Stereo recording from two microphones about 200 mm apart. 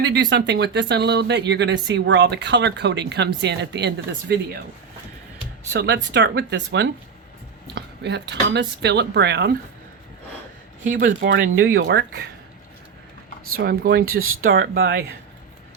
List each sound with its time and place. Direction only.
0.0 s speech: 55° right (ahead or behind)
5.7 s speech: 60° right (ahead or behind)
10.9 s speech: 50° right (ahead or behind)
11.6 s speech: 60° right (ahead or behind)
13.5 s speech: 50° right (ahead or behind)